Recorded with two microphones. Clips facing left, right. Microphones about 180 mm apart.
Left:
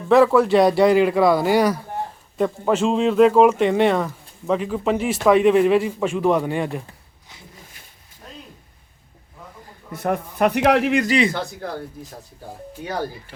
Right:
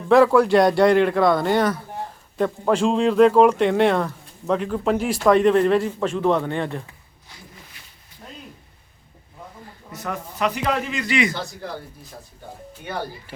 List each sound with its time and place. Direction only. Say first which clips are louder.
0.1 s speech: even; centre (ahead or behind)
9.9 s a man's voice: left 7 dB; 55° left (ahead or behind); by 11.0 s 75° left (ahead or behind)
11.0 s a man's voice: left 3 dB; 35° left (ahead or behind)
12.8 s a man's voice: left 3 dB; 40° left (ahead or behind)